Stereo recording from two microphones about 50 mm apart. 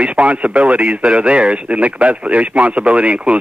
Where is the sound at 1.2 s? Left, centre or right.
Right.